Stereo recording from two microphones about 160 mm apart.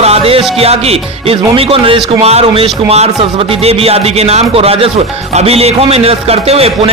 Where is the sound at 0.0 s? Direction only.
40° right (ahead or behind).